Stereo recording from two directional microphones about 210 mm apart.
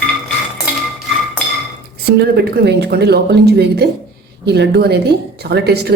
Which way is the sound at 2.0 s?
50° right (ahead or behind).